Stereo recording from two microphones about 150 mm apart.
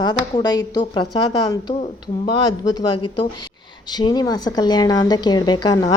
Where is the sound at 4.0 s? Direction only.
25° left (ahead or behind).